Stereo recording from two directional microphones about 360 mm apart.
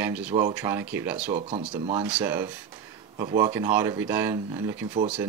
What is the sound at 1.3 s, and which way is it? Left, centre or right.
Speech, centre.